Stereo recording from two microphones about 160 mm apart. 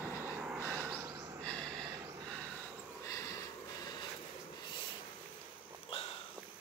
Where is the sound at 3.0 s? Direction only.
20° left (ahead or behind).